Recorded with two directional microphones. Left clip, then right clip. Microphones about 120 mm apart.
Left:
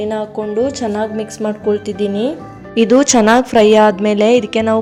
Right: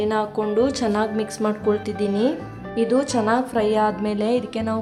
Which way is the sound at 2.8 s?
55° left (ahead or behind).